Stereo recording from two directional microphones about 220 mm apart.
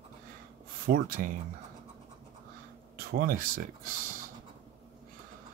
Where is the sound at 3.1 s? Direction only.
40° right (ahead or behind).